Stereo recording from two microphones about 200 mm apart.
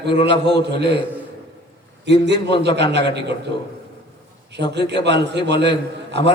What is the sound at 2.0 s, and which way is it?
A man's voice, 60° right (ahead or behind).